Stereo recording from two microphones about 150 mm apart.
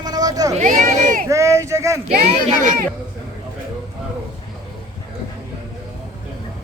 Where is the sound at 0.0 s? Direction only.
25° right (ahead or behind).